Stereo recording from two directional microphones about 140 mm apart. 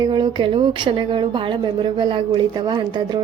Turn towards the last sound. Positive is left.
turn(degrees=-35)  # may be behind; listen again after turning